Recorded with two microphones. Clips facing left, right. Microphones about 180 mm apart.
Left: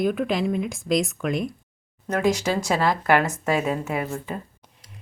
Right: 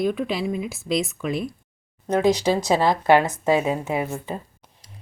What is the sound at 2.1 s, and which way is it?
Speech, 30° right (ahead or behind).